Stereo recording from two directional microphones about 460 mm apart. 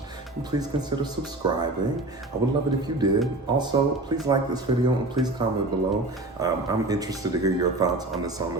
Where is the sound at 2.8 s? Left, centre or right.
Centre.